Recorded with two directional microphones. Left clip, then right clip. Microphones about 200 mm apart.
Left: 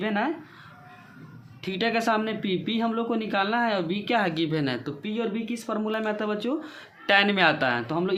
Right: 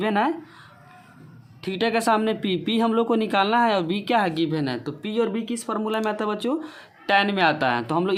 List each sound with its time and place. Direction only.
0.0 s a man's voice: 30° right (ahead or behind)
1.6 s a man's voice: 30° right (ahead or behind)